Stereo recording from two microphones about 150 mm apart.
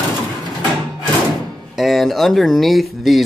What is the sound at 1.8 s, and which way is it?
Speech, centre (ahead or behind).